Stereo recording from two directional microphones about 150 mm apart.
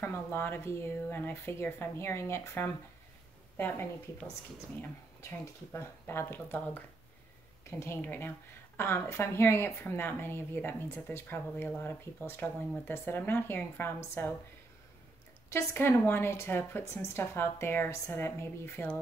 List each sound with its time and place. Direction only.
0.0 s speech: 15° left (ahead or behind)
5.4 s speech: 15° left (ahead or behind)
15.5 s speech: 15° left (ahead or behind)